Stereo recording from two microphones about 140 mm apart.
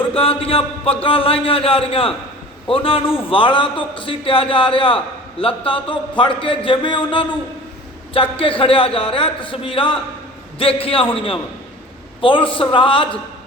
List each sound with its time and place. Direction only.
0.1 s a man's voice: 40° left (ahead or behind)